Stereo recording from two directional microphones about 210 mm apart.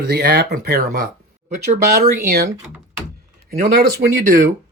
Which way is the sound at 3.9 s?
45° right (ahead or behind).